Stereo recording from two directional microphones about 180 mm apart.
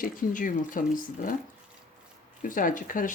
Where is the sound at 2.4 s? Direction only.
50° left (ahead or behind).